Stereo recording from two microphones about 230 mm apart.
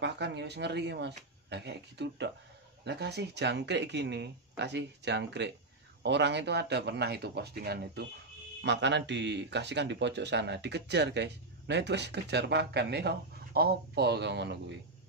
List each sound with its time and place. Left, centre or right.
0.0 s speech: right